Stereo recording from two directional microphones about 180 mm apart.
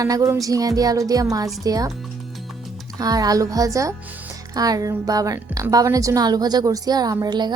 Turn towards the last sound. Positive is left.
turn(degrees=-25)  # may be behind; listen again after turning